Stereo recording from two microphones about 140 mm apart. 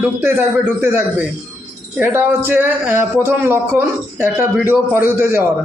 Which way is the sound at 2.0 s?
15° right (ahead or behind).